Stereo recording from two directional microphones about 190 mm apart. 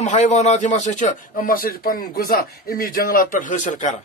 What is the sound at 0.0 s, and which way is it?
A man's voice, 40° left (ahead or behind).